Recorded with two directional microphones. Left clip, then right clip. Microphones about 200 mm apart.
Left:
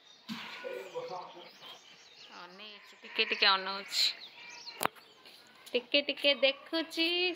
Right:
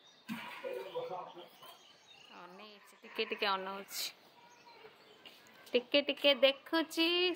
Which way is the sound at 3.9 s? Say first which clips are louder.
Left 12 dB; 35° right (ahead or behind).